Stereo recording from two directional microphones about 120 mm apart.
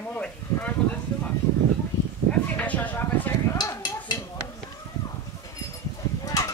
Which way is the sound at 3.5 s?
35° left (ahead or behind).